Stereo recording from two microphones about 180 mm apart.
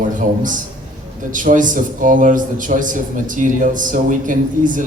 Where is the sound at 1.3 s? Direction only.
45° right (ahead or behind).